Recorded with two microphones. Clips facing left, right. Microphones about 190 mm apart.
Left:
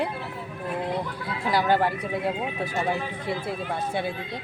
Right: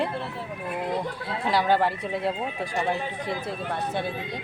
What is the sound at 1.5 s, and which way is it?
Speech, centre (ahead or behind).